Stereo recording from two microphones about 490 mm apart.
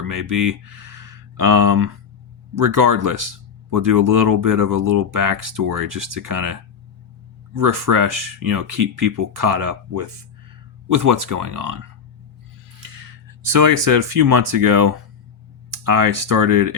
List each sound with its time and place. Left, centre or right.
0.0 s speech: right